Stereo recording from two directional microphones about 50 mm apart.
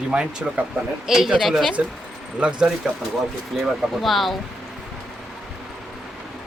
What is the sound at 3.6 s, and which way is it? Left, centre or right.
Speech, centre.